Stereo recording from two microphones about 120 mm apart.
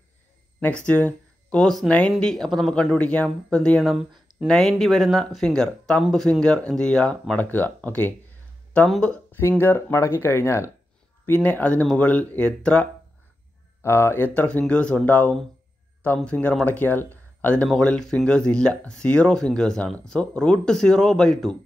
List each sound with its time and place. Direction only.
0.8 s speech: 10° left (ahead or behind)
3.9 s speech: 5° right (ahead or behind); by 8.1 s 15° left (ahead or behind)
8.8 s speech: centre (ahead or behind)
9.6 s speech: 20° left (ahead or behind)
13.8 s speech: 20° left (ahead or behind); by 21.5 s 5° left (ahead or behind)